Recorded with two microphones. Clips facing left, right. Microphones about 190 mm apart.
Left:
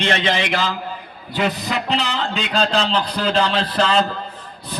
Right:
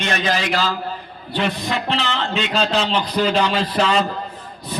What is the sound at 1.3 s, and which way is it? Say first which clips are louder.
A man's voice: even; 5° left (ahead or behind).